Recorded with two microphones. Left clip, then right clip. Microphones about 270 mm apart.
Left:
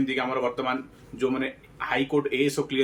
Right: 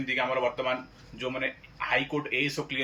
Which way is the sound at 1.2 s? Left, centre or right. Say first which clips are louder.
Left 4 dB; centre.